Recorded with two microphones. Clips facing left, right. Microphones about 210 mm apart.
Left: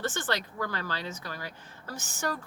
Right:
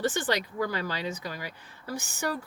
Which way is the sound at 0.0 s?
15° right (ahead or behind).